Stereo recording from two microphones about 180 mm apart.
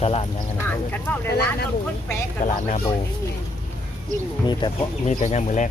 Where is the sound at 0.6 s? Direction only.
10° left (ahead or behind).